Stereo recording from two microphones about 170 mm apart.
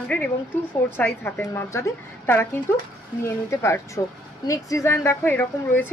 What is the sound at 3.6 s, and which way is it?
Speech, 15° left (ahead or behind).